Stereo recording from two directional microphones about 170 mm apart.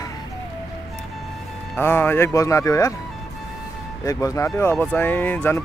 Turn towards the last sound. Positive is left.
turn(degrees=10)  # may be behind; listen again after turning